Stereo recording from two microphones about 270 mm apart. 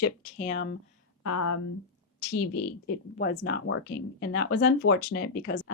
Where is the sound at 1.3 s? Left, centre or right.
Left.